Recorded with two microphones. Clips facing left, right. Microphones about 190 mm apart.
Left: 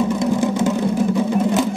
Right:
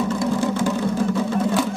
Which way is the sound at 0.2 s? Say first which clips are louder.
Left 3 dB; 20° left (ahead or behind).